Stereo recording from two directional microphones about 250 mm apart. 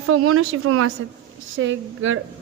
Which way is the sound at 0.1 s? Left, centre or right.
Right.